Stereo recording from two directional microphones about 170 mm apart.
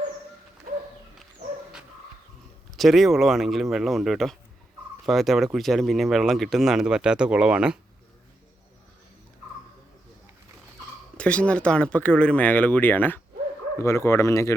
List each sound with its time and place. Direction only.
2.7 s speech: centre (ahead or behind)
11.2 s speech: 5° left (ahead or behind)